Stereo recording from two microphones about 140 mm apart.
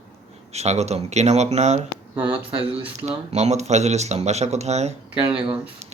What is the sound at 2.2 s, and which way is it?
Speech, 40° right (ahead or behind).